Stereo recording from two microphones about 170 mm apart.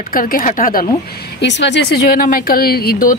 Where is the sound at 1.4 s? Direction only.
90° left; by 3.1 s 65° left (ahead or behind).